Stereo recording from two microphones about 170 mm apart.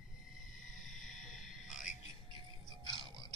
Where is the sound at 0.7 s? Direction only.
50° left (ahead or behind).